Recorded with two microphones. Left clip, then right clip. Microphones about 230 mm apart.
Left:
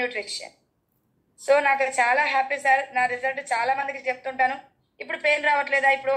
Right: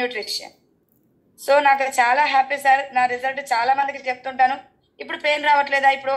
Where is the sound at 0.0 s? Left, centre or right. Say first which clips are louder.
Right 3 dB; right.